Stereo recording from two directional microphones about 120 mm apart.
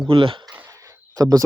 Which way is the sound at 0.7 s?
25° right (ahead or behind).